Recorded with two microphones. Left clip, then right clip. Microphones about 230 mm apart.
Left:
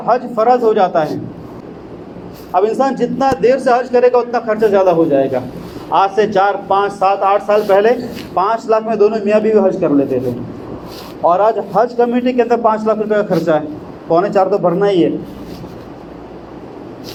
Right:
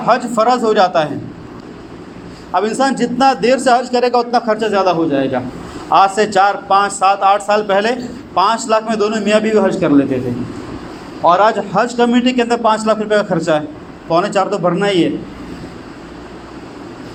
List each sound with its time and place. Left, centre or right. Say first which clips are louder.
0.0 s a man's voice: even; right
2.5 s a man's voice: left 1 dB; right
11.2 s a man's voice: right 1 dB; right